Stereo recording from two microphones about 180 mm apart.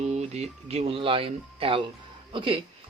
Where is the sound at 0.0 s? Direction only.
40° right (ahead or behind).